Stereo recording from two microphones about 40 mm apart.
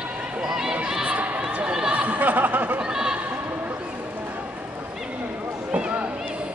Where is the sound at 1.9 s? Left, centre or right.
Right.